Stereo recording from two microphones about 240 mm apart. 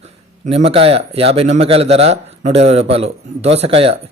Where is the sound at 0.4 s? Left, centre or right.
Right.